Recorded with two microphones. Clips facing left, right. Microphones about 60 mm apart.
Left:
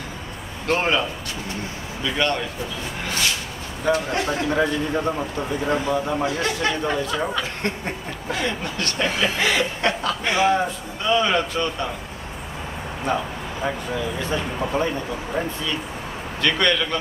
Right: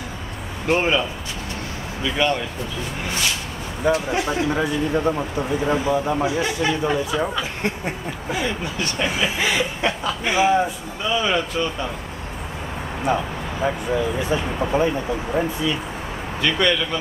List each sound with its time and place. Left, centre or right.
0.7 s speech: centre
2.1 s speech: centre
3.8 s speech: centre
13.0 s speech: centre
16.3 s speech: centre